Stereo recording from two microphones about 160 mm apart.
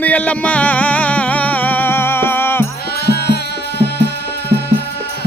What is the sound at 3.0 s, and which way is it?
Music, 90° left.